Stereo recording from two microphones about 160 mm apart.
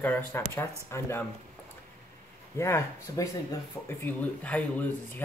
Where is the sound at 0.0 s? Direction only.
10° left (ahead or behind).